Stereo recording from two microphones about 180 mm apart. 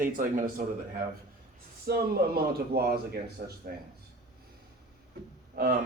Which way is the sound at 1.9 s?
60° right (ahead or behind).